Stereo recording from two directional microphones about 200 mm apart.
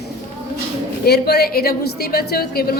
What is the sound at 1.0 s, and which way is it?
A woman's voice, 50° left (ahead or behind).